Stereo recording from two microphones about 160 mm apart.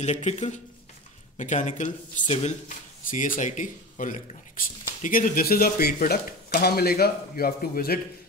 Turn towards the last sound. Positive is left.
turn(degrees=70)  # may be behind; listen again after turning